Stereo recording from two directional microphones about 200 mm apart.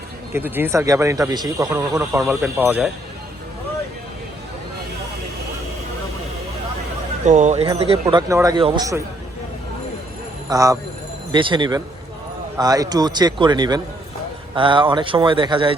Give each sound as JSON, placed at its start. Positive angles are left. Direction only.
{"t": 0.3, "sound": "speech", "side_deg": -10}
{"t": 7.3, "sound": "speech", "side_deg": -35}
{"t": 8.0, "sound": "a man's voice", "side_deg": -15}
{"t": 10.5, "sound": "a man's voice", "side_deg": -15}